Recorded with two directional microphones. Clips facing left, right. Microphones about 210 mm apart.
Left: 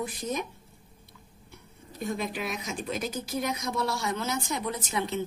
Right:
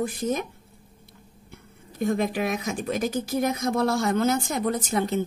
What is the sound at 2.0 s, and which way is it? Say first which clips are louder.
Speech: right 8 dB; 50° right (ahead or behind).